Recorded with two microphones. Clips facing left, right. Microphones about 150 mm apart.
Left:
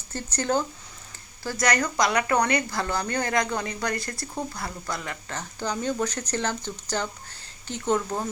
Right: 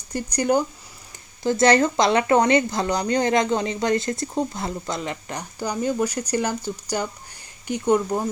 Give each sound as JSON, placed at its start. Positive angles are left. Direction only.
{"t": 0.1, "sound": "speech", "side_deg": -15}
{"t": 1.5, "sound": "speech", "side_deg": -25}